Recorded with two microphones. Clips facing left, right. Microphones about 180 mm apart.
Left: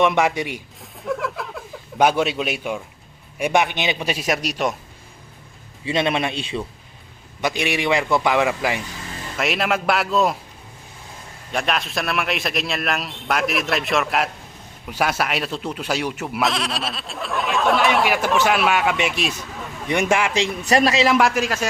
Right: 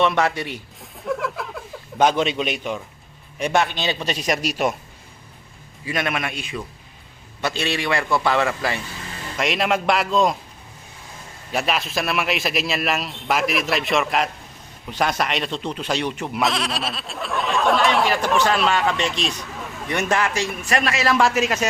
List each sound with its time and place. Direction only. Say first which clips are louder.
0.0 s a man's voice: left 2 dB; 15° left (ahead or behind)
0.8 s a sound: even; centre (ahead or behind)
3.3 s a man's voice: left 1 dB; 10° left (ahead or behind)
5.8 s a man's voice: left 4 dB; 25° left (ahead or behind)
7.4 s a man's voice: left 2 dB; 15° left (ahead or behind)
9.4 s speech: right 1 dB; centre (ahead or behind)
11.5 s speech: even; 5° right (ahead or behind)
19.9 s a man's voice: left 2 dB; 15° left (ahead or behind)
20.7 s a man's voice: left 6 dB; 35° left (ahead or behind)
21.2 s speech: even; 5° right (ahead or behind)